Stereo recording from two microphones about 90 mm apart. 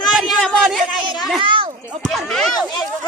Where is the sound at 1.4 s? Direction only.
70° right (ahead or behind).